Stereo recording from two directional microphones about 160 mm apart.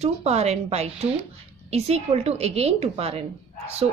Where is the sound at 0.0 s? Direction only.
45° right (ahead or behind).